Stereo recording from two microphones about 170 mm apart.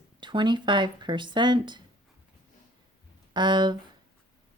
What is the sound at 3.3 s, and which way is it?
Speech, 25° right (ahead or behind).